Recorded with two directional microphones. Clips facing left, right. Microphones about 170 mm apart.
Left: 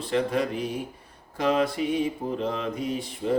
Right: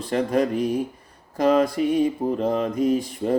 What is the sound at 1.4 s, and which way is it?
Mantra, 40° right (ahead or behind).